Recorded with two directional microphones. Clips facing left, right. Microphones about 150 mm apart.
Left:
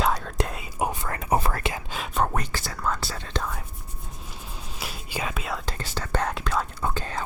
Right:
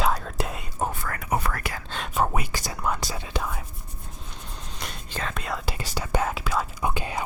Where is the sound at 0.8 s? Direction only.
20° left (ahead or behind).